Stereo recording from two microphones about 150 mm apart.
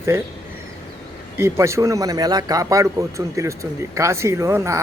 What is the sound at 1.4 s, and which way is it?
A man's voice, 15° right (ahead or behind).